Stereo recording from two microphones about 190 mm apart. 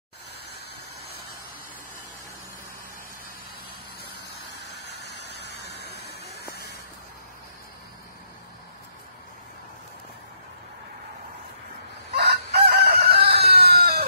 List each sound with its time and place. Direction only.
4.7 s vehicle: 65° left (ahead or behind)
12.1 s chicken: 60° right (ahead or behind)